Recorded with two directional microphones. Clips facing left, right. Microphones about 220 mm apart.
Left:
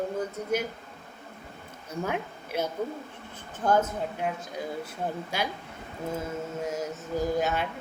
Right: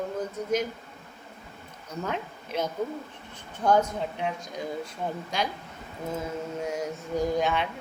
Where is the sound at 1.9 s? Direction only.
10° left (ahead or behind).